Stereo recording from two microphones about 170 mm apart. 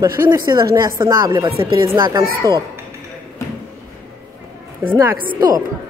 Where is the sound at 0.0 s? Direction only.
20° right (ahead or behind).